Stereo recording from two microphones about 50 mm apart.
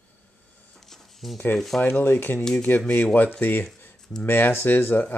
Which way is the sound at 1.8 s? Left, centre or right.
Left.